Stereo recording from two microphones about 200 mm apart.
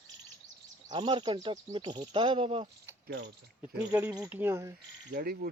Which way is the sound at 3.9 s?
15° right (ahead or behind).